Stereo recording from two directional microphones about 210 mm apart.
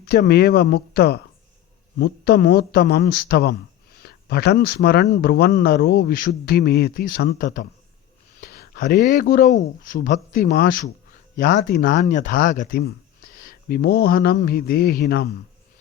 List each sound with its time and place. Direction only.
0.0 s speech: 50° left (ahead or behind)